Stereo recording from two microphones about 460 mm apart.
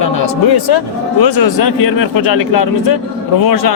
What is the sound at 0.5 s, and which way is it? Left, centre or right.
A man's voice, left.